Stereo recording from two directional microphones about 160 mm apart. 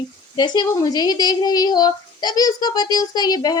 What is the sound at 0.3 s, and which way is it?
A woman's voice, 25° left (ahead or behind).